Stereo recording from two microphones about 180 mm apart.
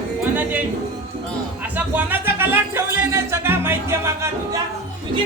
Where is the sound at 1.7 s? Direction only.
10° right (ahead or behind).